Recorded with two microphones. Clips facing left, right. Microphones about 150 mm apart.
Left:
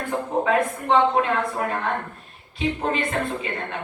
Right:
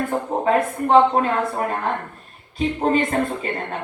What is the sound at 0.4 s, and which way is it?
A woman's voice, 40° right (ahead or behind).